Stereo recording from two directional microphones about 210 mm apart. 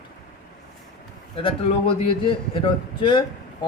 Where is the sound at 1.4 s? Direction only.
25° left (ahead or behind).